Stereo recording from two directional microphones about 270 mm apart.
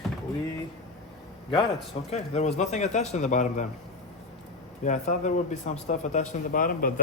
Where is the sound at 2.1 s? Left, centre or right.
Left.